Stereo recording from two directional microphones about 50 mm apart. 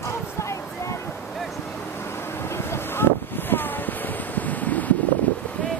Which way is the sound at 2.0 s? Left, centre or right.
Left.